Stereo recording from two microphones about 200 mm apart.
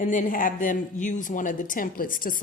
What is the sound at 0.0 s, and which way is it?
A woman's voice, 40° left (ahead or behind).